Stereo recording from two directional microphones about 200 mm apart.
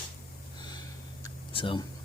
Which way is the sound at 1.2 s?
25° left (ahead or behind).